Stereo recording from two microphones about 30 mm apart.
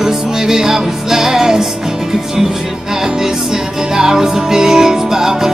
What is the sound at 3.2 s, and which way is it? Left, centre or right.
Music, centre.